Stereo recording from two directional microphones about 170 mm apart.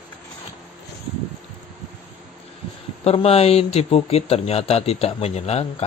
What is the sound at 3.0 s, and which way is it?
Speech, 35° left (ahead or behind).